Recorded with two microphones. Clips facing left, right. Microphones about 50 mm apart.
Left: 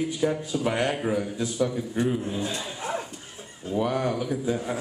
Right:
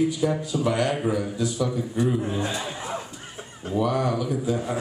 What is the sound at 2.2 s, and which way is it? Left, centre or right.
Speech, right.